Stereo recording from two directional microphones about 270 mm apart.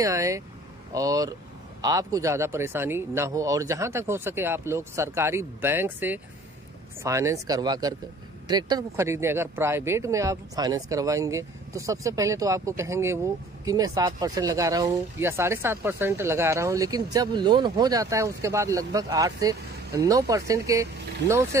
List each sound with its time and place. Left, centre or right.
0.0 s speech: centre